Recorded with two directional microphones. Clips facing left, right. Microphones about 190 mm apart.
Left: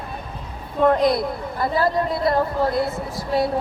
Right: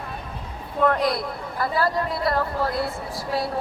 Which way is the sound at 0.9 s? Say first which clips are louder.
Left 9 dB; 20° left (ahead or behind).